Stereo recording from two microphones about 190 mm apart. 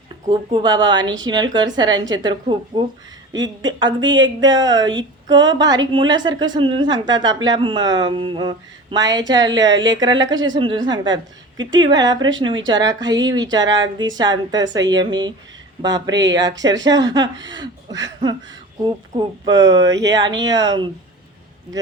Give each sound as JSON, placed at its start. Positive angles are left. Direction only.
{"t": 0.3, "sound": "speech", "side_deg": -25}